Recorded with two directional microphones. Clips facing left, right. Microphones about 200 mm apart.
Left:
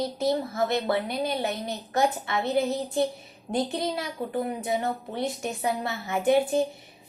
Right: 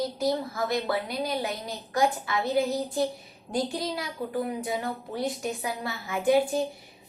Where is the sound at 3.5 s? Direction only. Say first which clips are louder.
Left 2 dB; 25° left (ahead or behind).